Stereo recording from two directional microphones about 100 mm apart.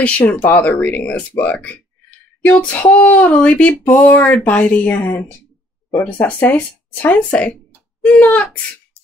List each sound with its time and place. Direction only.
0.0 s speech: 15° left (ahead or behind)